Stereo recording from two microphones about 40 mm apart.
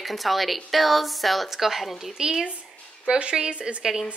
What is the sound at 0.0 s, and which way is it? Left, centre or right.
A woman's voice, centre.